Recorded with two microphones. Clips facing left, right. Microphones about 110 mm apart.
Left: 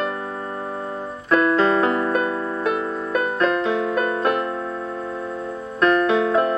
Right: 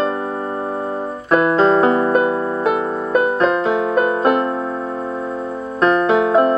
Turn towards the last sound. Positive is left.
turn(degrees=-30)  # may be behind; listen again after turning